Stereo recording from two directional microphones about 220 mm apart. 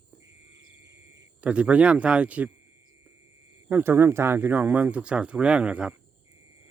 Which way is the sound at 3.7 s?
10° right (ahead or behind).